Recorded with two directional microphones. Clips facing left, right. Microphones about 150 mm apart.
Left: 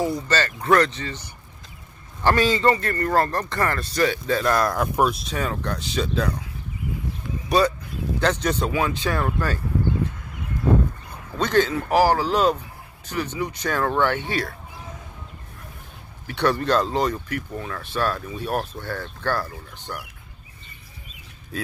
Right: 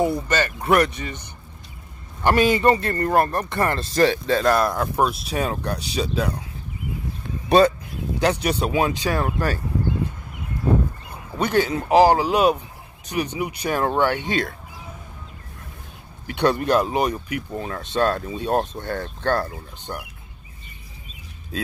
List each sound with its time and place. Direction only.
0.0 s a man's voice: 20° right (ahead or behind)
2.2 s a man's voice: 15° right (ahead or behind)
3.9 s speech: 35° right (ahead or behind)
4.7 s speech: 5° left (ahead or behind)
5.3 s a man's voice: 15° right (ahead or behind)
7.4 s speech: 25° right (ahead or behind)
8.2 s a man's voice: 10° right (ahead or behind)
11.1 s a man's voice: 10° right (ahead or behind)
16.3 s a man's voice: 15° right (ahead or behind)
17.5 s speech: 25° right (ahead or behind)